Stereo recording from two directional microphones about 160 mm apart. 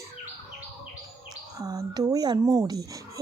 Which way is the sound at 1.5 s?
20° right (ahead or behind).